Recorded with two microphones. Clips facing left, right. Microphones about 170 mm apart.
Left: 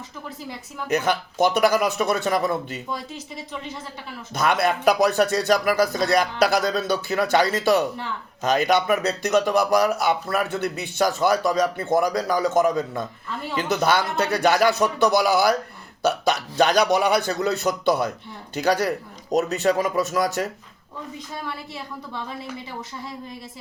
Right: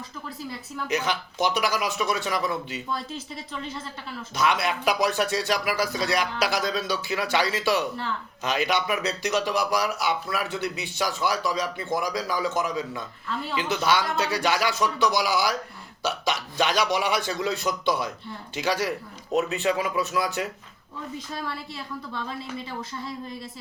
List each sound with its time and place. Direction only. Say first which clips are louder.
0.9 s speech: left 5 dB; 50° left (ahead or behind)
4.4 s speech: left 4 dB; 50° left (ahead or behind)
16.6 s speech: left 6 dB; 40° left (ahead or behind)
19.3 s speech: left 4 dB; 40° left (ahead or behind)